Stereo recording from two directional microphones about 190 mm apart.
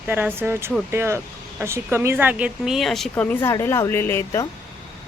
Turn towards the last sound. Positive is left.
turn(degrees=10)  # may be behind; listen again after turning